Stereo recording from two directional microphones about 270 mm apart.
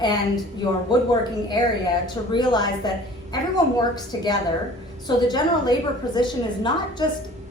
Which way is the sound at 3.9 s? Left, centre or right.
Centre.